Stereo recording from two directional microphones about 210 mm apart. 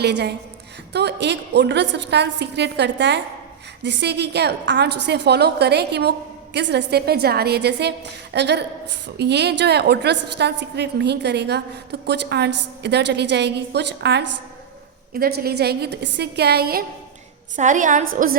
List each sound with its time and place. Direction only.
0.0 s a woman's voice: 50° right (ahead or behind)
17.6 s a woman's voice: 35° right (ahead or behind)